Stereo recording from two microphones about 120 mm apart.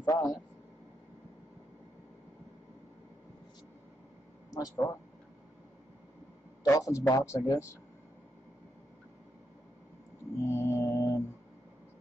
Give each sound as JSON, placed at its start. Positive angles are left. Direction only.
{"t": 0.0, "sound": "a sound", "side_deg": 30}
{"t": 4.6, "sound": "speech", "side_deg": 25}
{"t": 6.7, "sound": "speech", "side_deg": 25}
{"t": 10.3, "sound": "mantra", "side_deg": 20}